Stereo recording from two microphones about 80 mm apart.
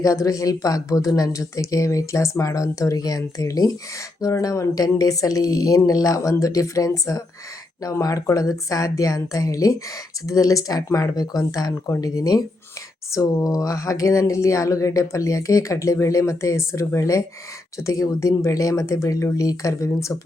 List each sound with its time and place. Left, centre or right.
0.0 s speech: left